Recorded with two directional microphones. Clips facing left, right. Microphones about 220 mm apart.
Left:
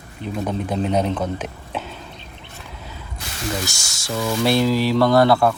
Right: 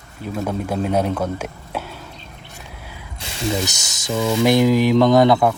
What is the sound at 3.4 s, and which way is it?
Speech, 20° right (ahead or behind).